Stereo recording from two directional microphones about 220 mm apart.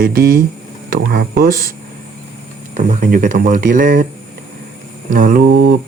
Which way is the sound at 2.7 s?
35° right (ahead or behind).